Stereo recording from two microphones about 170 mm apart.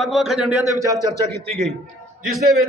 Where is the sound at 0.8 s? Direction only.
20° right (ahead or behind).